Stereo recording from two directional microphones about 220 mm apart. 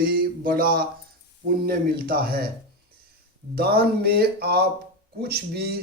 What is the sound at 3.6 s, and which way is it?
Speech, 45° right (ahead or behind).